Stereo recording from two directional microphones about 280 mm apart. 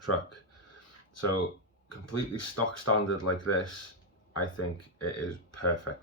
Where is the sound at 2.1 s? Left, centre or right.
Left.